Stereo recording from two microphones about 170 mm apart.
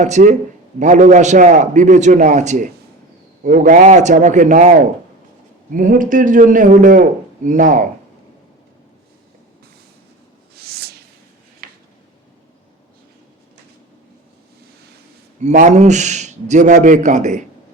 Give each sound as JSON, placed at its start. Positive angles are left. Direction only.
{"t": 0.0, "sound": "a man's voice", "side_deg": -45}
{"t": 10.6, "sound": "a sound", "side_deg": -65}
{"t": 15.4, "sound": "a man's voice", "side_deg": -45}